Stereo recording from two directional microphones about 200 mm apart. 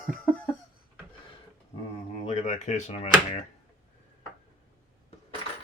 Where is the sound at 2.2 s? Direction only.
35° left (ahead or behind).